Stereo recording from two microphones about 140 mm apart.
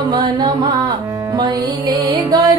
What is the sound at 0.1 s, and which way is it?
Music, 30° right (ahead or behind).